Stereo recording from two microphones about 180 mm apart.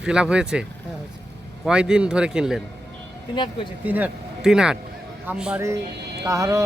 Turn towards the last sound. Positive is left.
turn(degrees=-20)  # may be behind; listen again after turning